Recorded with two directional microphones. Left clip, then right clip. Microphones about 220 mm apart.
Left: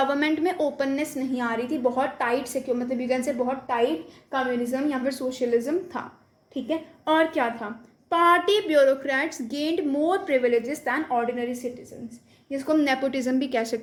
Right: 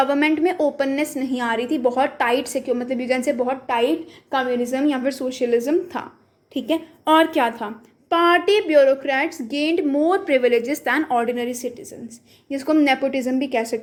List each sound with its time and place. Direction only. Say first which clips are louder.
0.0 s a woman's voice: right 5 dB; 20° right (ahead or behind)
8.1 s a woman's voice: right 3 dB; 20° right (ahead or behind); by 11.7 s 40° right (ahead or behind)
12.5 s a woman's voice: right 5 dB; 30° right (ahead or behind)